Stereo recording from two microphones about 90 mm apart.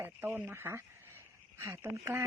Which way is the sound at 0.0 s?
25° right (ahead or behind).